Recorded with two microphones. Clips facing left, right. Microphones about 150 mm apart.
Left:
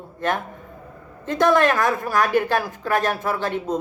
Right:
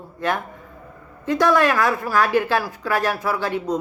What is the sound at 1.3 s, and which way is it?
Speech, 50° left (ahead or behind).